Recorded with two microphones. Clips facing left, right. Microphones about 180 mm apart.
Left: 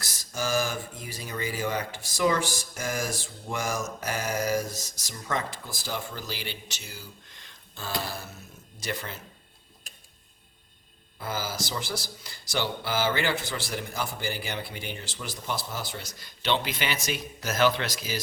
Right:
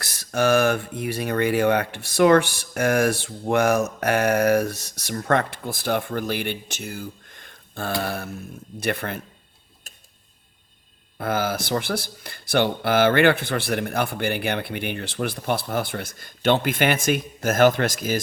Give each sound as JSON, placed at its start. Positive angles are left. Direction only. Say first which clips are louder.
{"t": 0.0, "sound": "speech", "louder": "right 10 dB", "side_deg": -65}
{"t": 11.2, "sound": "speech", "louder": "right 8 dB", "side_deg": -60}